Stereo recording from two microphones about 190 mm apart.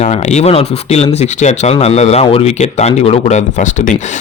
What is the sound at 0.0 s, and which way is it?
Speech, 35° left (ahead or behind).